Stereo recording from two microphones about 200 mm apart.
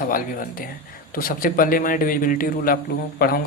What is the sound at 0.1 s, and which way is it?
Speech, 45° left (ahead or behind).